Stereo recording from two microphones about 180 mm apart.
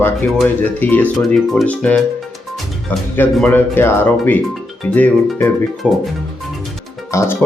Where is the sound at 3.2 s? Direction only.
10° left (ahead or behind).